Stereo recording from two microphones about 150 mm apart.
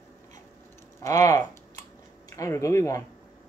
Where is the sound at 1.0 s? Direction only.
20° left (ahead or behind).